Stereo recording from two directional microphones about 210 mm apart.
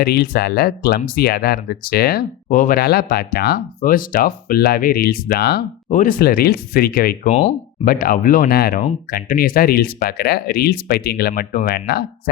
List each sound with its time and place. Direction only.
0.0 s speech: 50° left (ahead or behind)
5.9 s speech: 40° left (ahead or behind)
7.3 s speech: 30° left (ahead or behind)
7.9 s speech: 45° left (ahead or behind)